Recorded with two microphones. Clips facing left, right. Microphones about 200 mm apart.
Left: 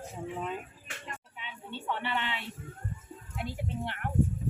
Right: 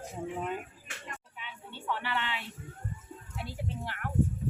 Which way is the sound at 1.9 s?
20° left (ahead or behind).